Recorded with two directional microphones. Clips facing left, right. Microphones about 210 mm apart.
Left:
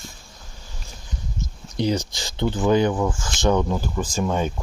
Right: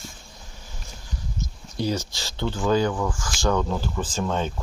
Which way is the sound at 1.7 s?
15° left (ahead or behind).